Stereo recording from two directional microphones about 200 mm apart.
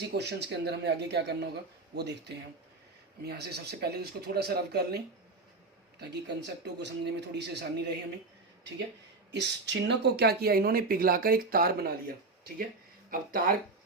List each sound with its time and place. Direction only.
0.1 s speech: 55° right (ahead or behind)
3.2 s speech: 55° right (ahead or behind)
9.3 s speech: 60° right (ahead or behind)